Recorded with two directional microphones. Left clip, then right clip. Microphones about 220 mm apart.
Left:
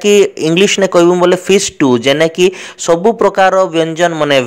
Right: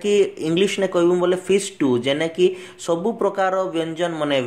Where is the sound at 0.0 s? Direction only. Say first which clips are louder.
Left 10 dB; 40° left (ahead or behind).